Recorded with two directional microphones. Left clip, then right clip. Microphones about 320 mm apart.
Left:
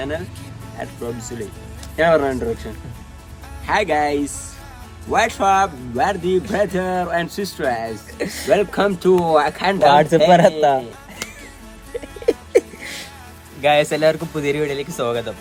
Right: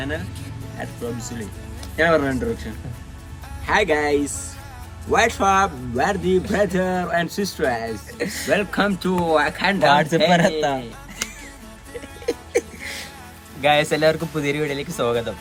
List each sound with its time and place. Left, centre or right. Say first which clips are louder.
0.0 s speech: left 3 dB; left
2.0 s speech: left 3 dB; centre
9.7 s speech: left 5 dB; centre
12.2 s a sound: left 6 dB; left
13.6 s speech: left 2 dB; centre